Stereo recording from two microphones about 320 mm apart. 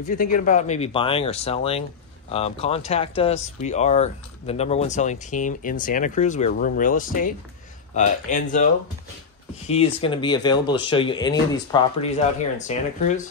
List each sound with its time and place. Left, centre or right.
0.0 s speech: left
9.7 s speech: centre